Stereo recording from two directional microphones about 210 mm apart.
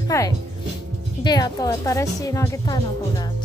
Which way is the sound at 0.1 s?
15° left (ahead or behind).